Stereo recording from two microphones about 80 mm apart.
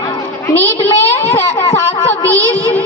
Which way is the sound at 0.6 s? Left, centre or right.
Left.